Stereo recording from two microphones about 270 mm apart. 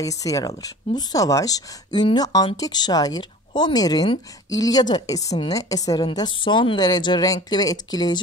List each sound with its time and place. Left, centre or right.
0.0 s speech: centre